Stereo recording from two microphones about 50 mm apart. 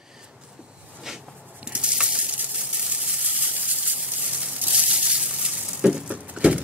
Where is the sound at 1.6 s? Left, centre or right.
Right.